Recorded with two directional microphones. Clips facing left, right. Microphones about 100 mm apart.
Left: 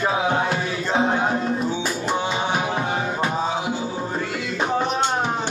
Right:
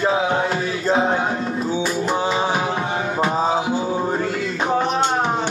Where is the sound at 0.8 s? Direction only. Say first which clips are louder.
Right 2 dB; 30° right (ahead or behind).